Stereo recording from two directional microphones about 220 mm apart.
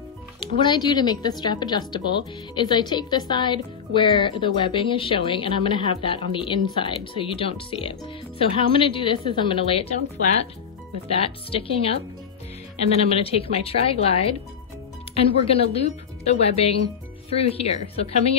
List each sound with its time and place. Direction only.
0.6 s speech: 20° left (ahead or behind)
11.1 s speech: 25° left (ahead or behind)